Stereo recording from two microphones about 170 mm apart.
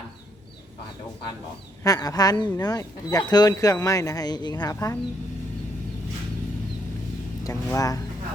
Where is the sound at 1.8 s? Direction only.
20° left (ahead or behind).